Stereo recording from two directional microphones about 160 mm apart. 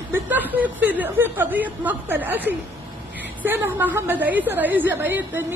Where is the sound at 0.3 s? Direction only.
10° right (ahead or behind).